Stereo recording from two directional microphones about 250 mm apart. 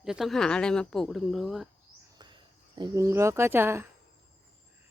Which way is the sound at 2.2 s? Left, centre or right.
Centre.